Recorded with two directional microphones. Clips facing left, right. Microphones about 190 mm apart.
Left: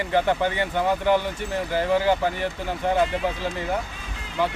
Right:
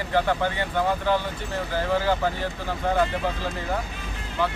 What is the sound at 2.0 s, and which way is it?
Speech, 20° left (ahead or behind).